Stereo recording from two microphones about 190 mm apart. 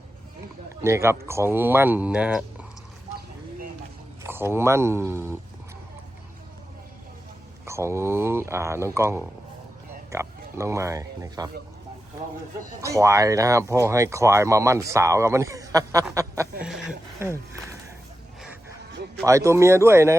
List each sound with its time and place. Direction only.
0.8 s speech: 15° right (ahead or behind)
4.2 s speech: 10° right (ahead or behind)
7.6 s speech: 15° right (ahead or behind)
12.8 s speech: 15° right (ahead or behind)
16.1 s a sound: 15° right (ahead or behind)
17.2 s speech: 15° right (ahead or behind)
19.2 s speech: 15° right (ahead or behind)